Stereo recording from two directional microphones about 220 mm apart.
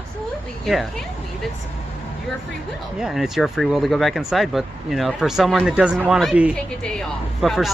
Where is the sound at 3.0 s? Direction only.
Centre (ahead or behind).